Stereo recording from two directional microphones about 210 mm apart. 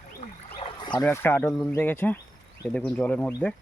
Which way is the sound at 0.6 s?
20° left (ahead or behind).